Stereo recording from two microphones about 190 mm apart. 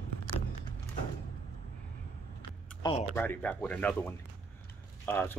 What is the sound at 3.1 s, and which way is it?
Speech, 10° left (ahead or behind).